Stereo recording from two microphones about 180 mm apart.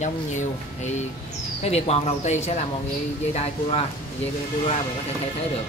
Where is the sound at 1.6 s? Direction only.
35° left (ahead or behind).